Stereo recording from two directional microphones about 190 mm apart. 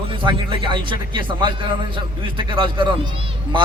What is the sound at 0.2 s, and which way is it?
A man's voice, 25° right (ahead or behind).